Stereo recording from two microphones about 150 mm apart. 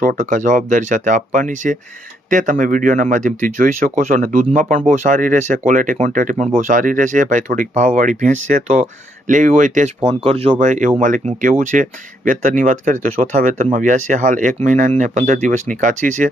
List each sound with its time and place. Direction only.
0.0 s speech: 60° right (ahead or behind); by 10.7 s 40° right (ahead or behind)
10.7 s speech: 60° right (ahead or behind)